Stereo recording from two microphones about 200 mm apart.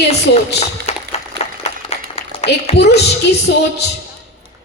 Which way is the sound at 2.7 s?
55° left (ahead or behind).